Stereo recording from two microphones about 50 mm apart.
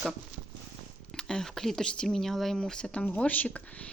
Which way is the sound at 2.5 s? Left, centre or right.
Centre.